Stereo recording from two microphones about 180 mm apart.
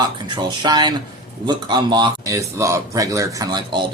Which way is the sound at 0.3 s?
25° right (ahead or behind).